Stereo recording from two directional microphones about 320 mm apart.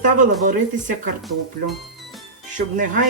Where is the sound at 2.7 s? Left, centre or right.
Right.